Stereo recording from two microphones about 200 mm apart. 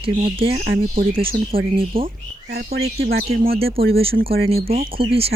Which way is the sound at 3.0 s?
50° right (ahead or behind).